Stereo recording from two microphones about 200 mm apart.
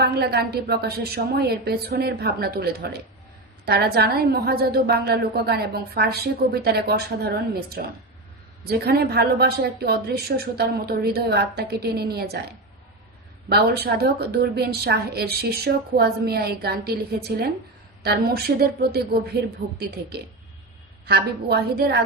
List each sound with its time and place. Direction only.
0.0 s a woman's voice: 55° right (ahead or behind)
13.5 s a woman's voice: 50° right (ahead or behind)
21.1 s a woman's voice: 50° right (ahead or behind)